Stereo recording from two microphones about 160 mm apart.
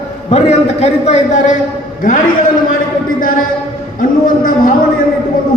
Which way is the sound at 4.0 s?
60° left (ahead or behind).